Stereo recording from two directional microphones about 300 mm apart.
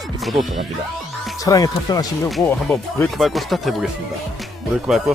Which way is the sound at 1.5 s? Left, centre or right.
Centre.